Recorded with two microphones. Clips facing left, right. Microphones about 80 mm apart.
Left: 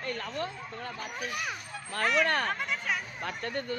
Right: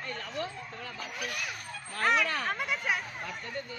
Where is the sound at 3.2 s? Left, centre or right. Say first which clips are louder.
Left 4 dB; left.